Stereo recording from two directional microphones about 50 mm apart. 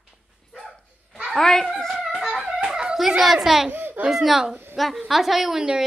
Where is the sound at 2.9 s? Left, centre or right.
Centre.